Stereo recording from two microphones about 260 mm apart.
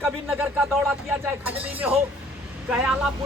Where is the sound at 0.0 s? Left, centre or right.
Centre.